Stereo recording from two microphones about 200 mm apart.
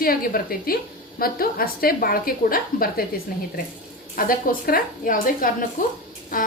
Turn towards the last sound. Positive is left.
turn(degrees=45)  # may be behind; listen again after turning